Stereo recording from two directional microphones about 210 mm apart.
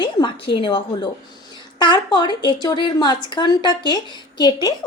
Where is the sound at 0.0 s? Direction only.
25° left (ahead or behind).